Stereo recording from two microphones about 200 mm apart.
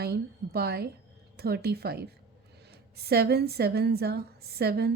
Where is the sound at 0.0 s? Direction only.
50° right (ahead or behind).